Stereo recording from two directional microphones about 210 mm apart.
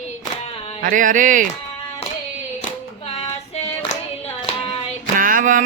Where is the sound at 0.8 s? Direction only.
40° right (ahead or behind).